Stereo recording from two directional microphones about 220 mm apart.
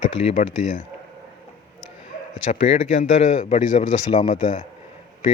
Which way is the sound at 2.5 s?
35° left (ahead or behind).